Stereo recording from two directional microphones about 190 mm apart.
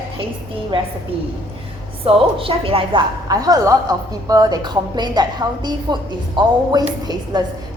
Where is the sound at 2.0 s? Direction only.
30° right (ahead or behind).